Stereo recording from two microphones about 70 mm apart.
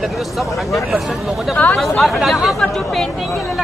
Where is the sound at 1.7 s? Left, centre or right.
Centre.